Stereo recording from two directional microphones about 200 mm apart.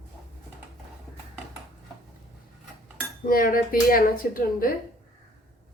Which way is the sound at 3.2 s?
45° left (ahead or behind).